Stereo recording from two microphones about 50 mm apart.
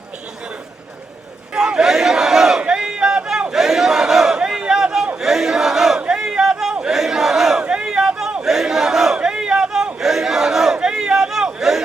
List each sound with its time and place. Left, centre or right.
1.5 s battle cry: centre
2.6 s a sound: centre
3.5 s battle cry: centre
4.4 s crowd: centre
5.2 s battle cry: centre
6.1 s a sound: centre
7.6 s a sound: centre
8.4 s battle cry: centre
9.1 s crowd: centre